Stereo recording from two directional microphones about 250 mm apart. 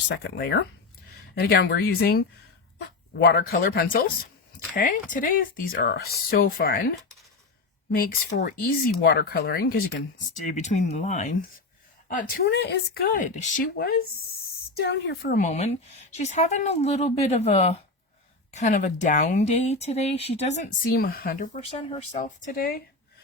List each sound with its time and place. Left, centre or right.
0.1 s speech: left
22.5 s speech: left